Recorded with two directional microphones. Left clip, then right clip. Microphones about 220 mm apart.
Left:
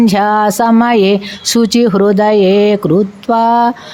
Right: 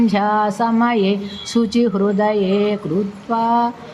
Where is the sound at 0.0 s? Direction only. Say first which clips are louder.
Left 6 dB; 50° left (ahead or behind).